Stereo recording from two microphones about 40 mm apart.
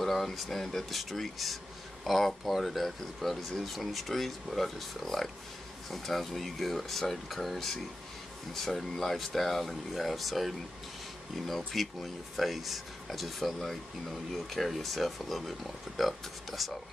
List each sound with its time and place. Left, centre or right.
0.0 s speech: centre